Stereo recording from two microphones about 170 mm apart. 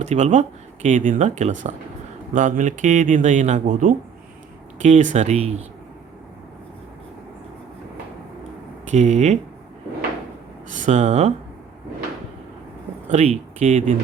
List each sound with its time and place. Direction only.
0.0 s speech: 45° right (ahead or behind)
8.9 s speech: 40° right (ahead or behind)
10.7 s speech: 45° right (ahead or behind)
13.1 s speech: 40° right (ahead or behind)